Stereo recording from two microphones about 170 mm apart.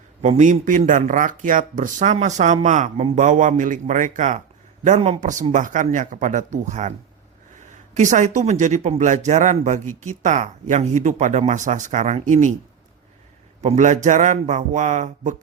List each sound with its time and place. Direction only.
0.2 s speech: 45° right (ahead or behind)
5.2 s speech: 50° right (ahead or behind)
13.6 s speech: 45° right (ahead or behind)